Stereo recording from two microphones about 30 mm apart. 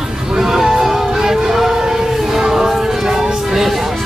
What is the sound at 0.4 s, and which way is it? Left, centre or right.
Music, centre.